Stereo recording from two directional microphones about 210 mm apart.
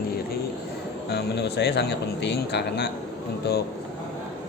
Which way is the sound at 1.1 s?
50° left (ahead or behind).